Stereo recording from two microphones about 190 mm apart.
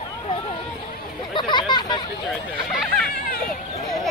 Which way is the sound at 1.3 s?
25° left (ahead or behind).